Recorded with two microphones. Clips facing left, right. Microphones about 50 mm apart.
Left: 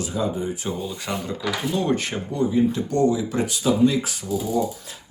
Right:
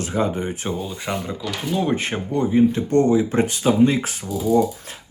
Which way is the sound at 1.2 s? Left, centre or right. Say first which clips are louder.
Left 1 dB; centre.